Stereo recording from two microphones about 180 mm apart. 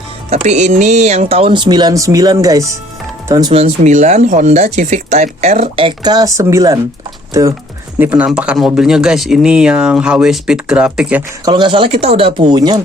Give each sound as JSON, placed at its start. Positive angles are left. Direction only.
{"t": 0.3, "sound": "speech", "side_deg": -40}
{"t": 3.6, "sound": "speech", "side_deg": -40}
{"t": 7.9, "sound": "speech", "side_deg": -10}
{"t": 11.4, "sound": "speech", "side_deg": -25}